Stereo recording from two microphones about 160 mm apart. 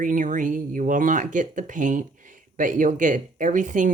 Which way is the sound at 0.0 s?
55° right (ahead or behind).